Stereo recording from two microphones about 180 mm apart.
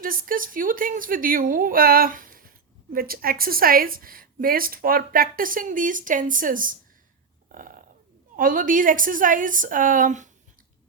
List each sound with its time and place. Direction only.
0.0 s a woman's voice: 50° right (ahead or behind)
7.5 s burping: 50° right (ahead or behind)
8.4 s a woman's voice: 50° right (ahead or behind)